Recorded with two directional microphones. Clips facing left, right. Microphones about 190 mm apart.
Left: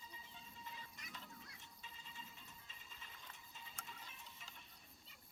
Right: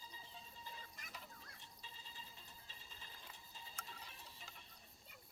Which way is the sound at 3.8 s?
35° right (ahead or behind).